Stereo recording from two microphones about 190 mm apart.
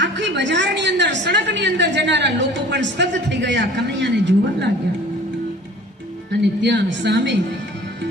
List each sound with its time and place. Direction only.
0.0 s a woman's voice: 65° right (ahead or behind)
6.4 s a woman's voice: 65° right (ahead or behind)